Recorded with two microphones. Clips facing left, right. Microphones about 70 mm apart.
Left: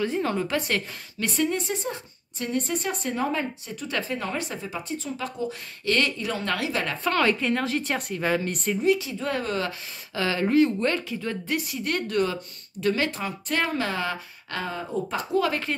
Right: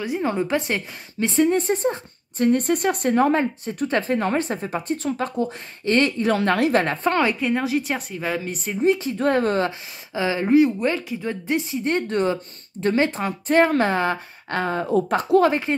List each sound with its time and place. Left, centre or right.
0.0 s a woman's voice: centre; by 5.2 s right
5.9 s a woman's voice: right
6.4 s a woman's voice: right
7.2 s a woman's voice: centre
8.7 s a woman's voice: right
9.7 s a woman's voice: centre; by 15.1 s right
15.1 s a woman's voice: right